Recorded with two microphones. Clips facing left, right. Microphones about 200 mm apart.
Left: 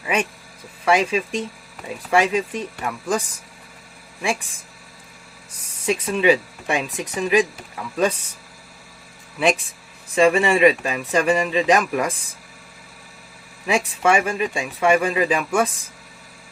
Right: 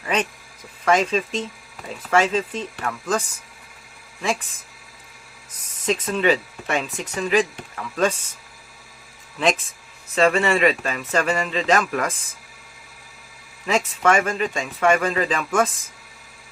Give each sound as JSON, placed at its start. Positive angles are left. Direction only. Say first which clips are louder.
{"t": 0.0, "sound": "speech", "louder": "left 1 dB", "side_deg": 10}
{"t": 5.6, "sound": "speech", "louder": "left 1 dB", "side_deg": 10}
{"t": 9.4, "sound": "speech", "louder": "left 2 dB", "side_deg": 10}
{"t": 13.7, "sound": "speech", "louder": "left 1 dB", "side_deg": 10}